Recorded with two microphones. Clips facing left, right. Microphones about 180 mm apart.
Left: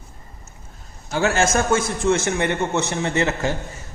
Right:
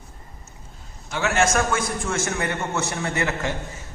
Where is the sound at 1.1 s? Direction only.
35° left (ahead or behind).